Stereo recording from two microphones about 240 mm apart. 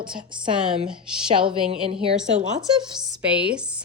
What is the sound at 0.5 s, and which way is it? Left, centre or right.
Speech, centre.